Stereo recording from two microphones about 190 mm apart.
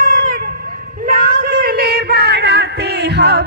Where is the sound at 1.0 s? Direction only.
50° right (ahead or behind).